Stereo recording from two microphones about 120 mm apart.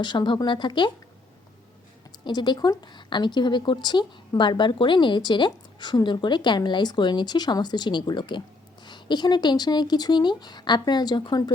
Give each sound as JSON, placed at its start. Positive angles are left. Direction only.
{"t": 0.0, "sound": "a woman's voice", "side_deg": 40}
{"t": 2.2, "sound": "a woman's voice", "side_deg": 40}